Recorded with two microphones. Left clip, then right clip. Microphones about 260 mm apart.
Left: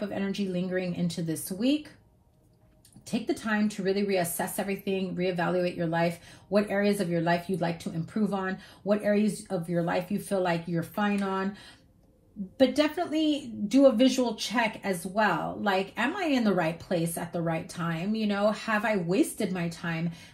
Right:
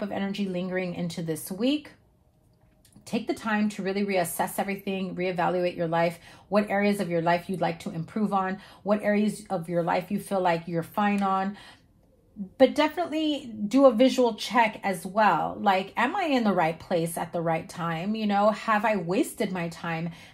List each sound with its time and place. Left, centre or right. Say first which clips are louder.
0.0 s a woman's voice: right 1 dB; right
3.3 s a woman's voice: right 1 dB; right
12.5 s a woman's voice: right 3 dB; right